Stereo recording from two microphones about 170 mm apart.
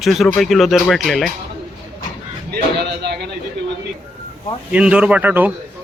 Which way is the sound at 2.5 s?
75° right (ahead or behind).